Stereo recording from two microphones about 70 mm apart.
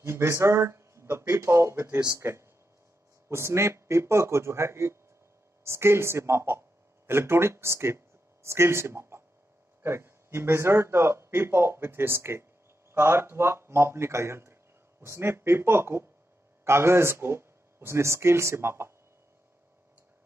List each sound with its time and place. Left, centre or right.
0.0 s speech: right